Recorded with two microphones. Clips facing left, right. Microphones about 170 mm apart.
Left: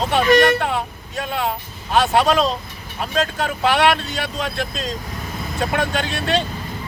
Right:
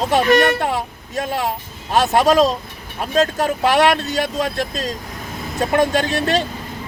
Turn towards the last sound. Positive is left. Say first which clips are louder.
# right 3 dB
turn(degrees=-45)  # may be behind; listen again after turning